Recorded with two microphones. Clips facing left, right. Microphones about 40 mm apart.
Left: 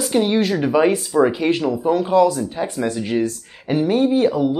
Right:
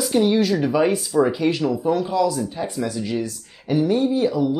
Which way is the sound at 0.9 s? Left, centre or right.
Left.